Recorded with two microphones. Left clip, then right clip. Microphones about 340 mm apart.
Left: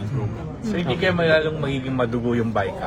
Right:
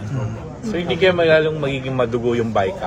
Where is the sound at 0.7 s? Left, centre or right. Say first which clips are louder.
Right 5 dB; right.